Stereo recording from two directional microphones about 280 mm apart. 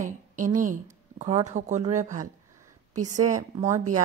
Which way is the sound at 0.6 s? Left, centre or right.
Right.